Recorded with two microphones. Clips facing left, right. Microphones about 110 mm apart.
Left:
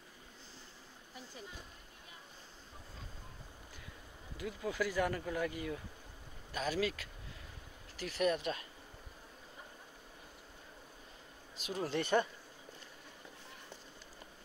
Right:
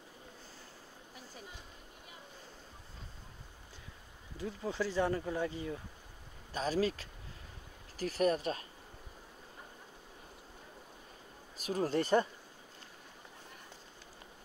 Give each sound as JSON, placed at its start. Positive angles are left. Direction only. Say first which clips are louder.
{"t": 4.4, "sound": "speech", "louder": "right 1 dB", "side_deg": -30}
{"t": 11.5, "sound": "speech", "louder": "right 4 dB", "side_deg": -40}